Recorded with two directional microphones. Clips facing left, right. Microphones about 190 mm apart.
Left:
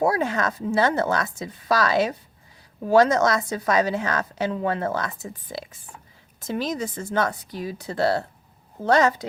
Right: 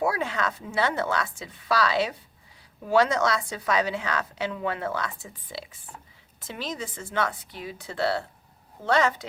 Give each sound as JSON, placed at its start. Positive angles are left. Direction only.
{"t": 0.0, "sound": "a woman's voice", "side_deg": 40}